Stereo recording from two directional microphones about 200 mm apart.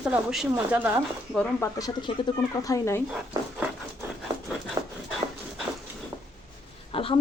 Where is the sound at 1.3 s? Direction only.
15° left (ahead or behind).